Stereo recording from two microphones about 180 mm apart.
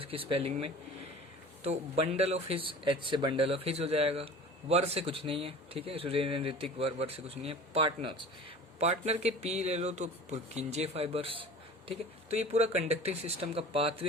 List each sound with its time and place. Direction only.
0.0 s speech: 30° right (ahead or behind)